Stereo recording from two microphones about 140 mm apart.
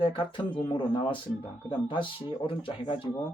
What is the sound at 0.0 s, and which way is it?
Speech, 35° left (ahead or behind).